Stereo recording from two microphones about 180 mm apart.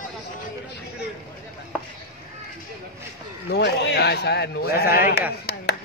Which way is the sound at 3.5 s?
65° left (ahead or behind).